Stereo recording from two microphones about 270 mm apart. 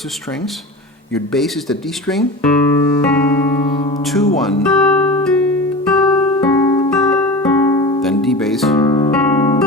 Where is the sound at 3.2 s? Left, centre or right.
Centre.